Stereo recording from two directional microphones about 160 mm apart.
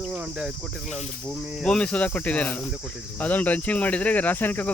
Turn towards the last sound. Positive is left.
turn(degrees=10)  # may be behind; listen again after turning